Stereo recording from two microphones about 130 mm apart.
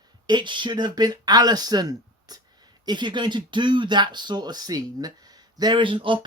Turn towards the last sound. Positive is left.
turn(degrees=-40)  # may be behind; listen again after turning